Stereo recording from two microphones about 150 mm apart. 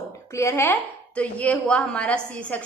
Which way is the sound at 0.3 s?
15° left (ahead or behind).